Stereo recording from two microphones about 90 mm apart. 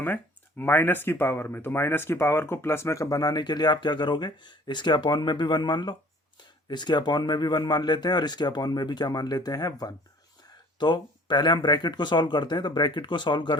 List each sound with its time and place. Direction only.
0.6 s speech: 20° left (ahead or behind); by 13.6 s 60° left (ahead or behind)